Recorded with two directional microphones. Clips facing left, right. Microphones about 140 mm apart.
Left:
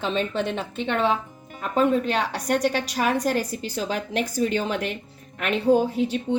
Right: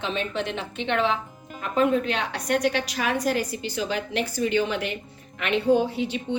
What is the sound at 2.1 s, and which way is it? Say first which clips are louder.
A woman's voice: left 2 dB; 40° left (ahead or behind).